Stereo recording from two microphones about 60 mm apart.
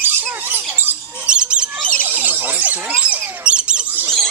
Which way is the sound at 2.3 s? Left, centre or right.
Right.